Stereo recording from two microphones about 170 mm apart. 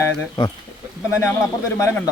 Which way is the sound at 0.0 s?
25° left (ahead or behind).